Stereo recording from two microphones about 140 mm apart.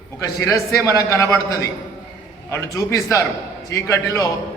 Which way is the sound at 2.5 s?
20° left (ahead or behind).